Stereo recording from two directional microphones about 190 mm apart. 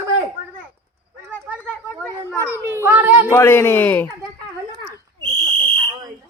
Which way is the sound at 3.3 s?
10° left (ahead or behind).